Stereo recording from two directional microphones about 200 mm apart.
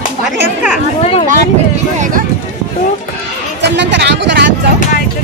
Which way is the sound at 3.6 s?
60° right (ahead or behind).